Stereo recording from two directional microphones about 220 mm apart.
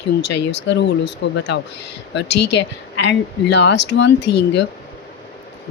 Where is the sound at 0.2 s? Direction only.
50° left (ahead or behind).